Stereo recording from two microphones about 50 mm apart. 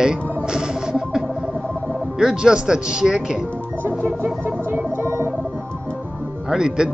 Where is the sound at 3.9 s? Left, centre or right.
Right.